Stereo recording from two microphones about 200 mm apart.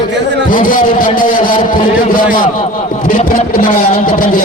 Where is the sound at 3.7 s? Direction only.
30° left (ahead or behind).